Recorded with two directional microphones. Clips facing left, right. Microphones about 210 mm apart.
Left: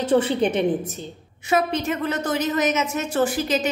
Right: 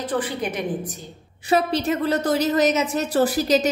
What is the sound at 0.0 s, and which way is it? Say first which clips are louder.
Speech: left 6 dB; 25° left (ahead or behind).